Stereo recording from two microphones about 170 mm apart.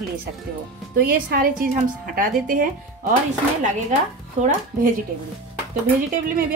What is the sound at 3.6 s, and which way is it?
Speech, 45° right (ahead or behind).